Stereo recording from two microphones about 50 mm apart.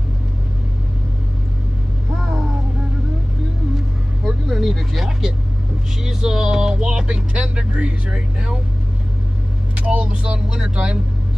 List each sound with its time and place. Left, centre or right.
2.1 s vehicle: centre
4.5 s speech: centre
6.0 s vehicle: centre
9.8 s speech: right